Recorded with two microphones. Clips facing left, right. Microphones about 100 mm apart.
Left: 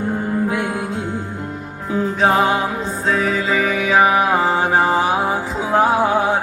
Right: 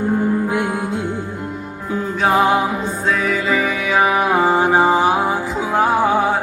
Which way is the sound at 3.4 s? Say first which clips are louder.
Even; centre (ahead or behind).